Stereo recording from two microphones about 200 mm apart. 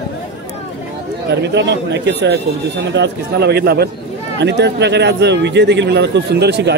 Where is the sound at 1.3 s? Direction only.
60° right (ahead or behind).